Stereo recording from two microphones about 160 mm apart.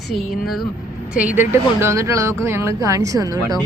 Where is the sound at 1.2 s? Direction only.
10° right (ahead or behind).